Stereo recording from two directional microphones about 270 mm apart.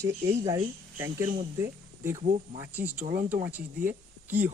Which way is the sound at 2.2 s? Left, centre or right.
Right.